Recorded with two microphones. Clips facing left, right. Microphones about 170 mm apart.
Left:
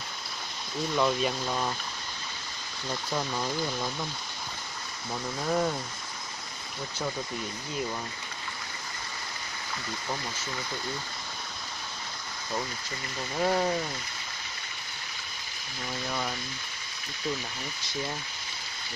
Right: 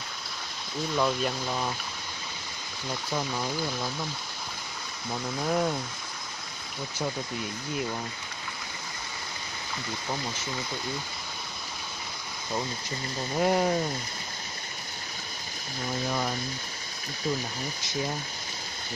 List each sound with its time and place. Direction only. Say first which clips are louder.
0.9 s speech: left 1 dB; centre (ahead or behind)
2.9 s speech: even; centre (ahead or behind)
5.1 s speech: right 1 dB; 5° right (ahead or behind)
13.4 s speech: right 2 dB; 15° right (ahead or behind)